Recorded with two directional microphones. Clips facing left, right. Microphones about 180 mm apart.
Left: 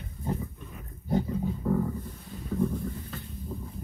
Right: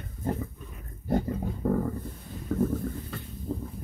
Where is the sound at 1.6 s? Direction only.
50° right (ahead or behind).